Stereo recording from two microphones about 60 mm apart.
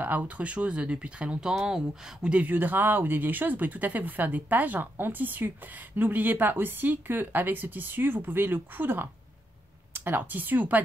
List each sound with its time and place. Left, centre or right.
0.0 s speech: right
2.4 s speech: right